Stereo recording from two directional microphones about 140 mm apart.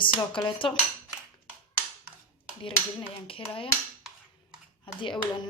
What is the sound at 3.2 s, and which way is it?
Speech, 40° left (ahead or behind).